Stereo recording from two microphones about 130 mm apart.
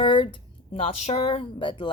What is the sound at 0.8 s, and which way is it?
Speech, 55° left (ahead or behind).